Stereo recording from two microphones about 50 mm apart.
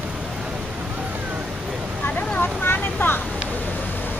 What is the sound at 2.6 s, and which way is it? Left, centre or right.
Vehicle, left.